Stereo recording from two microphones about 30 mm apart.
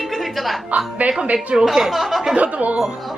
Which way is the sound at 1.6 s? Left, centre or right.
Centre.